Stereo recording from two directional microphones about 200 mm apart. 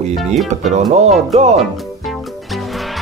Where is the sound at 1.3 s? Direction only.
30° right (ahead or behind).